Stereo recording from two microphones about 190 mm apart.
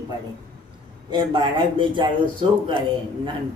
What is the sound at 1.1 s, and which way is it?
A man's voice, 25° right (ahead or behind).